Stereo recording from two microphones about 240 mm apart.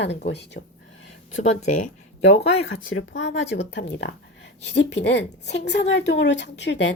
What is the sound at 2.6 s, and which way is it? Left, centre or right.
A woman's voice, left.